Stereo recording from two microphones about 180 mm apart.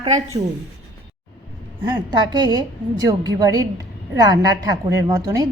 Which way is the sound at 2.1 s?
25° right (ahead or behind).